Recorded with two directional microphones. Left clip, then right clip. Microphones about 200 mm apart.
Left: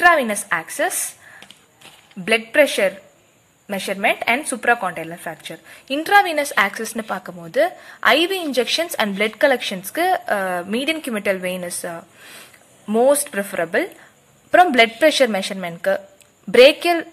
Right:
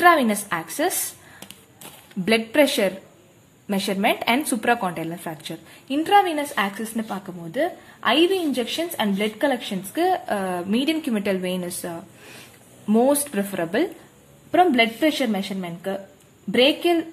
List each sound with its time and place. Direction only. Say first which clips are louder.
0.0 s a woman's voice: left 2 dB; 10° left (ahead or behind)
2.2 s a woman's voice: left 3 dB; 10° left (ahead or behind)
5.9 s a woman's voice: left 3 dB; 25° left (ahead or behind)
14.5 s a woman's voice: left 5 dB; 35° left (ahead or behind)